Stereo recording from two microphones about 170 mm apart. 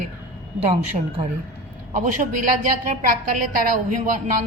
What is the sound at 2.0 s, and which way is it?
A woman's voice, 50° right (ahead or behind).